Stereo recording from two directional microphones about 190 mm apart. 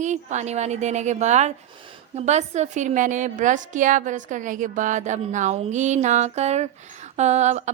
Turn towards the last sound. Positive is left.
turn(degrees=-35)  # may be behind; listen again after turning